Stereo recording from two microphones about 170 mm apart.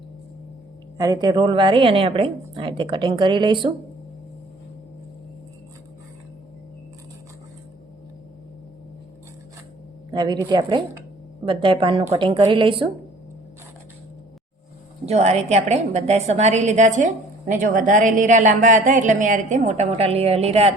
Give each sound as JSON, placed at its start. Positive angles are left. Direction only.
{"t": 0.9, "sound": "a woman's voice", "side_deg": -20}
{"t": 10.1, "sound": "a woman's voice", "side_deg": -25}
{"t": 15.0, "sound": "a woman's voice", "side_deg": -40}